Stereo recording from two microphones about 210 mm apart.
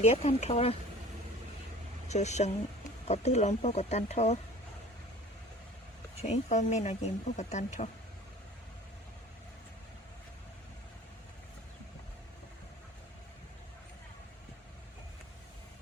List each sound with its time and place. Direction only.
0.0 s speech: 30° left (ahead or behind)
2.0 s speech: 35° left (ahead or behind)
6.2 s speech: 35° left (ahead or behind)